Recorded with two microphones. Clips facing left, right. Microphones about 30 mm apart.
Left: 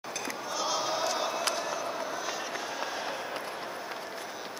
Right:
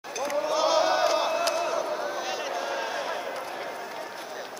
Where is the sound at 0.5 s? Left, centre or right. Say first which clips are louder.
Right 8 dB; right.